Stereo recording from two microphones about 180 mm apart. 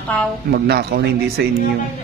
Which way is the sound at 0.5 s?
60° right (ahead or behind).